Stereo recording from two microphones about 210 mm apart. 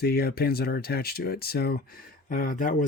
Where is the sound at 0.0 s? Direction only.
50° left (ahead or behind).